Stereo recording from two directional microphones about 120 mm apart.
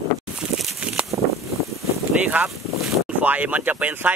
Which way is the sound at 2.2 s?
15° right (ahead or behind).